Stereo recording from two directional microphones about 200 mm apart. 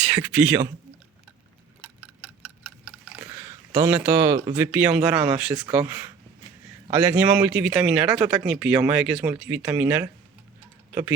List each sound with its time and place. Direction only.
0.0 s speech: 10° right (ahead or behind)
3.7 s a man's voice: 10° right (ahead or behind)